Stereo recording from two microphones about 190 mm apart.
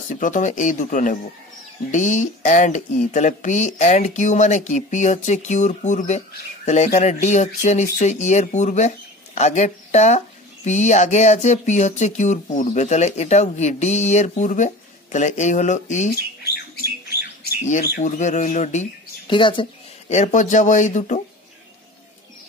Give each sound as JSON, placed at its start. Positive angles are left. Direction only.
{"t": 0.1, "sound": "speech", "side_deg": 40}
{"t": 17.6, "sound": "speech", "side_deg": 40}
{"t": 19.2, "sound": "speech", "side_deg": 25}